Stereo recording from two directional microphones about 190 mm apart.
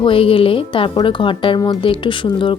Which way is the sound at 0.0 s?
30° left (ahead or behind).